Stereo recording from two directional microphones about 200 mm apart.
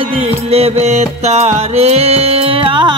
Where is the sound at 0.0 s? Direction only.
30° right (ahead or behind).